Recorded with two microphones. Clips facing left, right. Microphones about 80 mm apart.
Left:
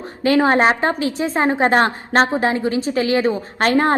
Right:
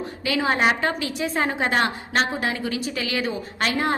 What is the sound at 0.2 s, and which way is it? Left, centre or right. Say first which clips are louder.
A woman's voice: left 8 dB; left.